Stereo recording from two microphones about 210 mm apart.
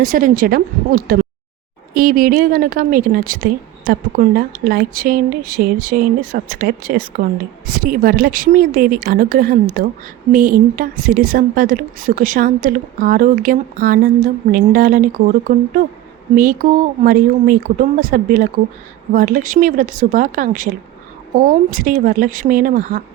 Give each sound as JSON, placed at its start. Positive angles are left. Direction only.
{"t": 0.0, "sound": "a woman's voice", "side_deg": -40}